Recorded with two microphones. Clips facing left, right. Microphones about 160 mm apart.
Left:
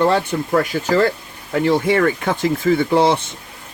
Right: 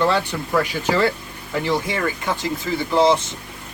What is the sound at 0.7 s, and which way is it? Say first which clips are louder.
Speech: left 2 dB; 45° left (ahead or behind).